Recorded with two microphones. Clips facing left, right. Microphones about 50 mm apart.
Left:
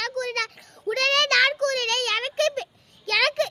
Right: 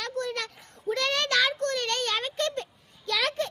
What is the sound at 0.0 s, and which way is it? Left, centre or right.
Child singing, left.